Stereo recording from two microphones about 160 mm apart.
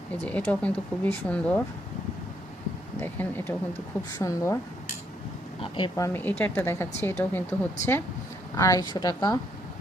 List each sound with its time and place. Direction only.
0.3 s speech: 10° left (ahead or behind)
3.0 s speech: 10° left (ahead or behind)
5.7 s a woman's voice: 30° left (ahead or behind)
6.4 s a woman's voice: 10° left (ahead or behind)